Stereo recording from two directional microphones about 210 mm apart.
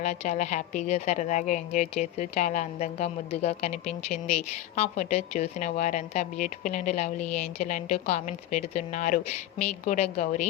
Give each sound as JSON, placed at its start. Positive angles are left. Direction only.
{"t": 0.0, "sound": "a woman's voice", "side_deg": 35}